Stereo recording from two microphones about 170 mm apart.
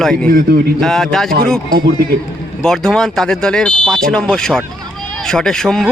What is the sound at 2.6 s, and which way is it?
A man's voice, 5° left (ahead or behind).